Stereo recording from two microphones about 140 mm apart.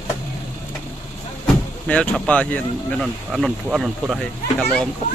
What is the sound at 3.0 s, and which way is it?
Speech, centre (ahead or behind).